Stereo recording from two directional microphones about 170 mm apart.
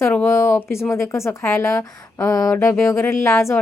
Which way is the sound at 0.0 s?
10° left (ahead or behind).